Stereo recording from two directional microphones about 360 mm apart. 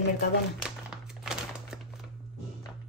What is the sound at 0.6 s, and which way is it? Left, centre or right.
Crumpling, centre.